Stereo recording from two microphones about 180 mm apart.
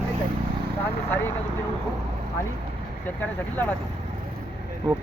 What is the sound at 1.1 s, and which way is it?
Speech, 10° left (ahead or behind).